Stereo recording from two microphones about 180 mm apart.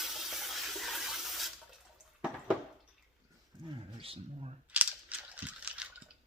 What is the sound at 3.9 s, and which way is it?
Speech, 30° right (ahead or behind).